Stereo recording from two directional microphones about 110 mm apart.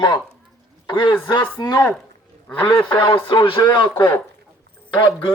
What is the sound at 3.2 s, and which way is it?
Speech, 50° left (ahead or behind).